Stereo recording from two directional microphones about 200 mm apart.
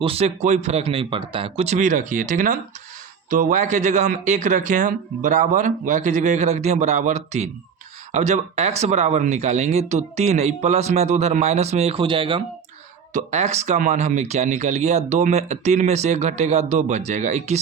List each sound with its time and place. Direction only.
0.0 s speech: 30° right (ahead or behind)